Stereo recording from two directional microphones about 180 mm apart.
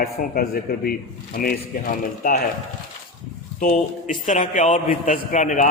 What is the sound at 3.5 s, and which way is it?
A man's voice, 45° left (ahead or behind).